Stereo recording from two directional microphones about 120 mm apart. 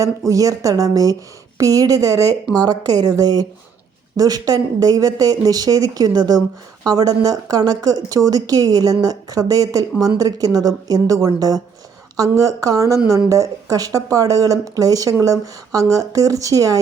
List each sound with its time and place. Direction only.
0.3 s speech: 30° right (ahead or behind)